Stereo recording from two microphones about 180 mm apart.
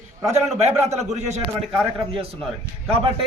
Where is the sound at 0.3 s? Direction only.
35° right (ahead or behind).